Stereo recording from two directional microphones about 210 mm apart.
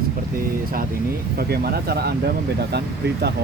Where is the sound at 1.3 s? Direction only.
45° right (ahead or behind).